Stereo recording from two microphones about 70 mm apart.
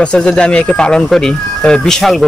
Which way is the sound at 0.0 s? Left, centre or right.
Centre.